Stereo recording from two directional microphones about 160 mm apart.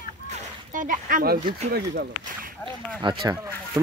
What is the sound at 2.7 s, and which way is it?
Speech, 30° right (ahead or behind).